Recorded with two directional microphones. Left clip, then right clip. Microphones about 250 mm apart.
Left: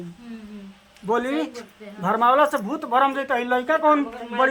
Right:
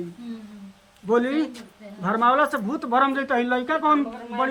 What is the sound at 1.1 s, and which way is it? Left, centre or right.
Speech, left.